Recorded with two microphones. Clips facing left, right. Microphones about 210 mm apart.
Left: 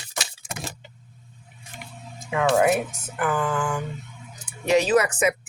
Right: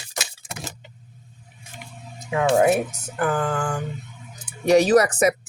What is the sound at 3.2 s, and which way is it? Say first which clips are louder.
Speech: right 2 dB; 40° right (ahead or behind).